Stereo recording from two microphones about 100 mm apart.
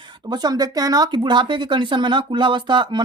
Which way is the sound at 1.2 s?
50° right (ahead or behind).